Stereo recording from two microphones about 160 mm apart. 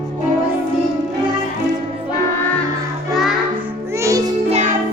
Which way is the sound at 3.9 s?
20° right (ahead or behind).